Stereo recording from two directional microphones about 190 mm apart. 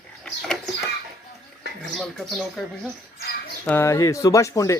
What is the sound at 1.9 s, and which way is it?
Speech, centre (ahead or behind).